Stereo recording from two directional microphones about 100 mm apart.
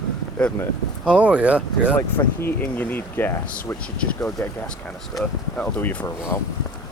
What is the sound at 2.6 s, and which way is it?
Speech, 15° left (ahead or behind).